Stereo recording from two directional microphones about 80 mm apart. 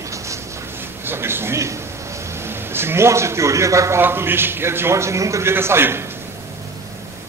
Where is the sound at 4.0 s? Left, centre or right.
Right.